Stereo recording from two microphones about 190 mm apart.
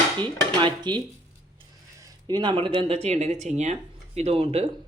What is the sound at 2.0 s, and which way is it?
Speech, 20° right (ahead or behind).